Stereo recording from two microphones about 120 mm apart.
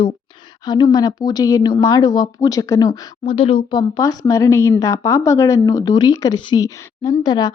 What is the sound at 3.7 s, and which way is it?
A woman's voice, 35° left (ahead or behind).